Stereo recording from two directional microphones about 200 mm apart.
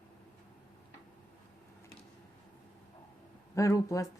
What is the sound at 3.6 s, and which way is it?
Speech, 15° left (ahead or behind).